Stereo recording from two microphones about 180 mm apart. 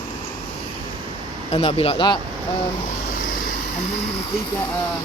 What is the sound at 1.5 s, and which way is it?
Speech, 30° left (ahead or behind).